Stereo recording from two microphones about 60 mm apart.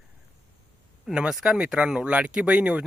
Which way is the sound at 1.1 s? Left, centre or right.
Centre.